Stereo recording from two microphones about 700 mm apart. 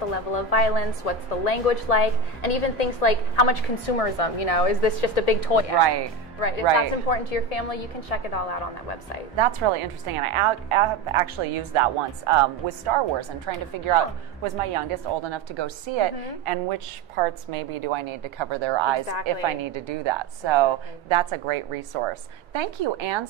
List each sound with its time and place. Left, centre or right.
0.1 s a woman's voice: left
5.8 s a woman's voice: right
6.4 s a woman's voice: left
9.4 s a woman's voice: right